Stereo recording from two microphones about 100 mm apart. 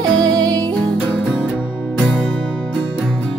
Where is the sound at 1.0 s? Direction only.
10° left (ahead or behind).